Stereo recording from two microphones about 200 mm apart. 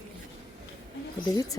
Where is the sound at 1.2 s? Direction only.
20° left (ahead or behind).